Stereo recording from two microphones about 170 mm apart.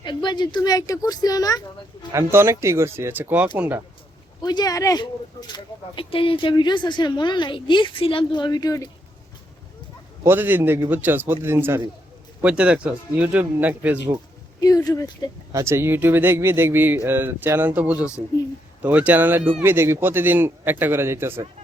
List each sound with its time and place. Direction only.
0.0 s speech: 25° left (ahead or behind)
2.1 s speech: 15° right (ahead or behind)
4.4 s speech: 25° left (ahead or behind)
10.2 s speech: 10° right (ahead or behind)
14.6 s speech: 20° left (ahead or behind)
15.5 s speech: 15° right (ahead or behind)